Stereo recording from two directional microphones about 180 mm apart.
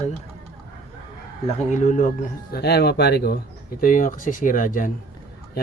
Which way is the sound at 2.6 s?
65° left (ahead or behind).